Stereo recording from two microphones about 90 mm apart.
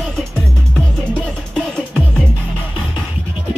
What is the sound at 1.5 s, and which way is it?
Music, 10° left (ahead or behind).